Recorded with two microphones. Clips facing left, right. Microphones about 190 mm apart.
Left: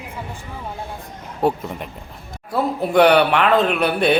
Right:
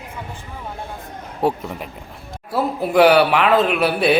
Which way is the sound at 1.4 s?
Centre (ahead or behind).